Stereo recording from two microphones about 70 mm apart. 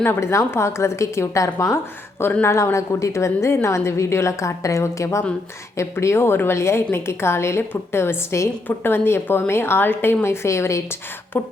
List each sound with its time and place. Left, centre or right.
0.2 s a woman's voice: left
11.3 s beatboxing: left